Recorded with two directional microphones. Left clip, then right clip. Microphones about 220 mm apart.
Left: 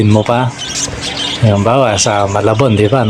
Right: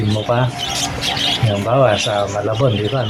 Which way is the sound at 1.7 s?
40° left (ahead or behind).